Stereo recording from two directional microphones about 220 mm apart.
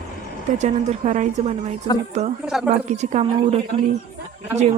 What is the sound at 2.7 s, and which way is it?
A man's voice, 30° right (ahead or behind).